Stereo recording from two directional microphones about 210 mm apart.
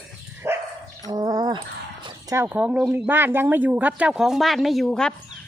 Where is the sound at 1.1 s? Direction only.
20° right (ahead or behind).